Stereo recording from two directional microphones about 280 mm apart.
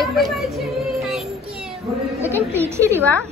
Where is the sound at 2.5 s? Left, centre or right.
Centre.